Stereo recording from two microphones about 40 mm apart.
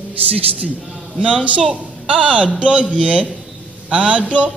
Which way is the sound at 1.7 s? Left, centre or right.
Right.